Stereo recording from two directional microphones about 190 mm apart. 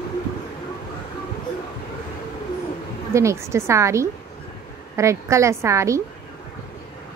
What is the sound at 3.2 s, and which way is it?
A woman's voice, 15° right (ahead or behind).